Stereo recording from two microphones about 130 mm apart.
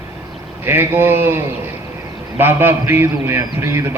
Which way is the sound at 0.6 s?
15° right (ahead or behind).